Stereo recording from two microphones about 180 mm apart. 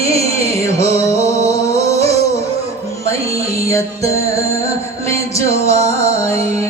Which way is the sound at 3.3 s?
15° left (ahead or behind).